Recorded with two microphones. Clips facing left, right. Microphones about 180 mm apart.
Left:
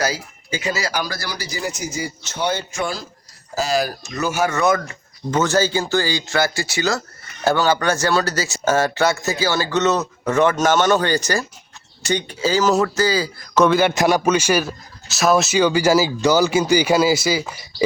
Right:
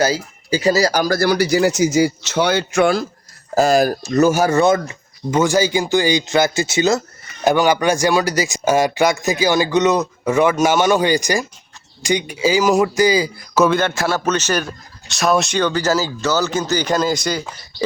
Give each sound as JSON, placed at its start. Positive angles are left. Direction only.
{"t": 0.0, "sound": "speech", "side_deg": -30}
{"t": 3.5, "sound": "speech", "side_deg": -50}
{"t": 5.3, "sound": "speech", "side_deg": -10}
{"t": 13.5, "sound": "a man's voice", "side_deg": 0}
{"t": 13.8, "sound": "a man's voice", "side_deg": 15}